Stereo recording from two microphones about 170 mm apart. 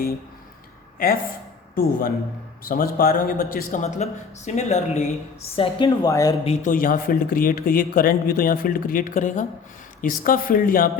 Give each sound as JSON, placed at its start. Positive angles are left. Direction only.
{"t": 0.9, "sound": "a man's voice", "side_deg": 55}
{"t": 5.5, "sound": "speech", "side_deg": 30}
{"t": 6.7, "sound": "speech", "side_deg": 55}
{"t": 10.0, "sound": "speech", "side_deg": 55}